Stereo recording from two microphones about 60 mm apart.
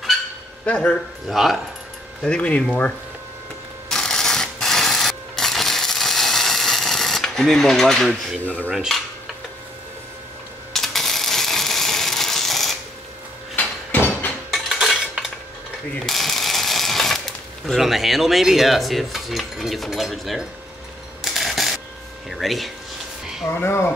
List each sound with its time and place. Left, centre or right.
0.7 s speech: centre
1.3 s cutlery: centre
2.2 s speech: centre
3.9 s a sound: centre
8.4 s speech: left
8.7 s cutlery: centre
10.7 s a sound: centre
13.6 s a sound: left
14.5 s dishes: centre
16.0 s ratchet: centre
17.6 s cutlery: centre
21.2 s a sound: centre
22.3 s cutlery: centre
23.5 s speech: left